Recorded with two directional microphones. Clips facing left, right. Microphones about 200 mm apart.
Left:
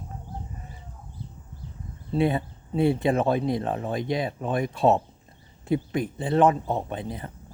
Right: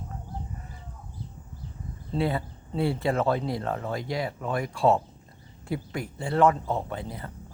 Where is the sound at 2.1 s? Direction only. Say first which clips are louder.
Left 4 dB; 20° left (ahead or behind).